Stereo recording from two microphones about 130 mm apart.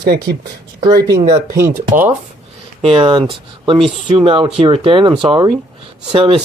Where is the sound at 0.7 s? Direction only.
30° right (ahead or behind).